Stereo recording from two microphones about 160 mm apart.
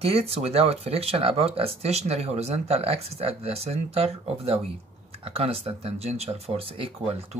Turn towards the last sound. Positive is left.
turn(degrees=-35)  # may be behind; listen again after turning